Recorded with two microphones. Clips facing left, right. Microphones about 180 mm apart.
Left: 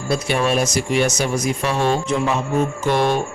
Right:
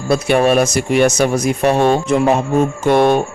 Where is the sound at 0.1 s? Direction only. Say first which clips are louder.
Right 7 dB; 55° right (ahead or behind).